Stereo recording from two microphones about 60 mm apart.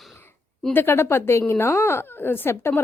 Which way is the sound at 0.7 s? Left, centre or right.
Left.